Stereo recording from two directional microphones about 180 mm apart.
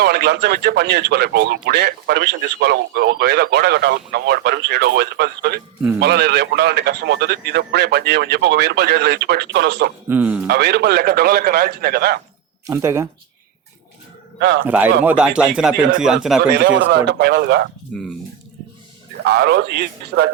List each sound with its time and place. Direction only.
0.0 s a man's voice: 65° right (ahead or behind)
10.1 s speech: 10° right (ahead or behind)
10.5 s speech: 65° right (ahead or behind)
12.6 s speech: 15° right (ahead or behind)
14.3 s a man's voice: 70° right (ahead or behind)
15.0 s speech: 5° right (ahead or behind)
16.5 s a man's voice: 70° right (ahead or behind)
17.9 s speech: centre (ahead or behind)
19.3 s a man's voice: 65° right (ahead or behind)